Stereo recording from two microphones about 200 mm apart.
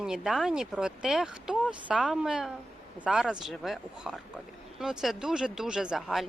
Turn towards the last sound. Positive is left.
turn(degrees=0)  # may be behind; listen again after turning